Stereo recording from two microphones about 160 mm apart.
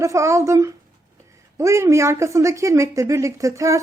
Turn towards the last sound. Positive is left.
turn(degrees=-20)  # may be behind; listen again after turning